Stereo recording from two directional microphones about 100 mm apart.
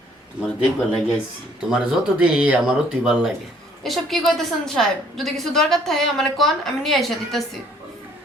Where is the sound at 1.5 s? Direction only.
5° right (ahead or behind).